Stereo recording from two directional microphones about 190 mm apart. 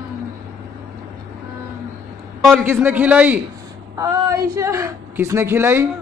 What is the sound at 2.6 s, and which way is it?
Speech, 10° right (ahead or behind).